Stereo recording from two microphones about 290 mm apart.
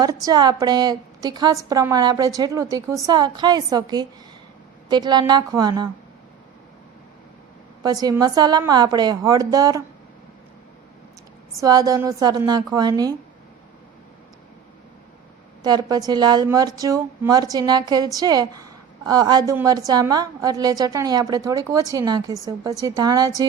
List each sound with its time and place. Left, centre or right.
0.0 s a woman's voice: centre
7.8 s a woman's voice: centre
11.5 s a woman's voice: centre
15.6 s a woman's voice: centre